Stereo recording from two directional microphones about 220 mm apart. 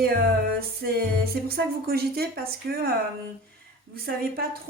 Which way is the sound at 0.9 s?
45° right (ahead or behind).